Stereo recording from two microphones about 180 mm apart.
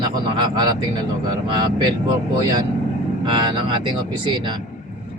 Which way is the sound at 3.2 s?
25° right (ahead or behind).